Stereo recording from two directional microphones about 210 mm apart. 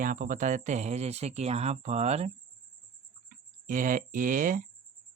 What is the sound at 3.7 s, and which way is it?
Speech, 40° right (ahead or behind).